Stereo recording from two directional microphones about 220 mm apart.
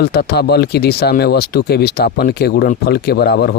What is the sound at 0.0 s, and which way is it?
Speech, 45° left (ahead or behind).